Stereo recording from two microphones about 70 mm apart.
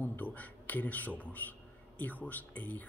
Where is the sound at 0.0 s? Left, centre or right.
Left.